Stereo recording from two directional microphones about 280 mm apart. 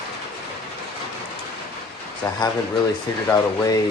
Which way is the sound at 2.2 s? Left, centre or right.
Centre.